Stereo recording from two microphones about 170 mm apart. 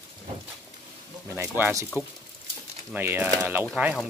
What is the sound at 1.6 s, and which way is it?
Speech, 15° right (ahead or behind).